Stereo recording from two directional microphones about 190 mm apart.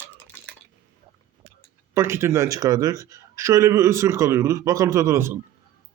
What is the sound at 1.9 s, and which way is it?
A man's voice, 15° right (ahead or behind).